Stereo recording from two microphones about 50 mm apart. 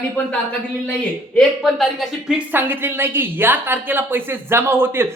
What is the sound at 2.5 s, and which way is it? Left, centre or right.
A woman's voice, right.